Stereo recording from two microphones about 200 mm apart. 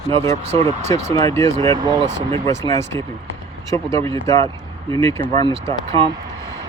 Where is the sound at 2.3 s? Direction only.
15° left (ahead or behind).